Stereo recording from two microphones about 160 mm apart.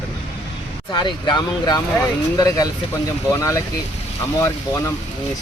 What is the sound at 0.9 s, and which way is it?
Speech, 25° left (ahead or behind).